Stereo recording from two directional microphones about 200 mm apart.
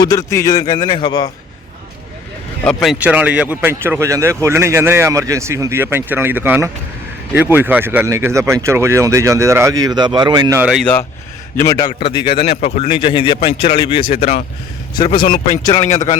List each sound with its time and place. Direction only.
0.0 s speech: 15° left (ahead or behind)
2.6 s speech: centre (ahead or behind); by 10.6 s 20° right (ahead or behind)
10.6 s speech: centre (ahead or behind)
11.5 s a man's voice: 15° left (ahead or behind)
11.9 s speech: 30° left (ahead or behind)
12.5 s speech: 40° left (ahead or behind); by 15.9 s 20° left (ahead or behind)
15.9 s speech: 35° left (ahead or behind)